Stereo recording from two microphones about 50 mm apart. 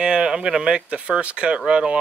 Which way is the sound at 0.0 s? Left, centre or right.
Centre.